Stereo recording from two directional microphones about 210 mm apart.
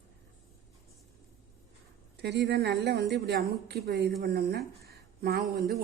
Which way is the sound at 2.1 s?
55° right (ahead or behind).